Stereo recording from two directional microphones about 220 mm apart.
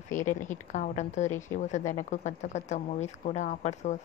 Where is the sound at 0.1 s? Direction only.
35° left (ahead or behind).